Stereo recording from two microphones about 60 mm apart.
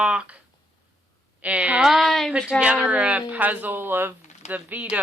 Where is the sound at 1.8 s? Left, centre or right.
Centre.